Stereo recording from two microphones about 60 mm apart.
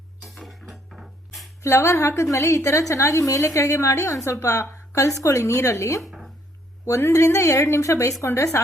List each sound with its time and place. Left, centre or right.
0.3 s music: centre
1.6 s a woman's voice: left
6.0 s a sound: centre
7.0 s a woman's voice: left
8.3 s a woman's voice: left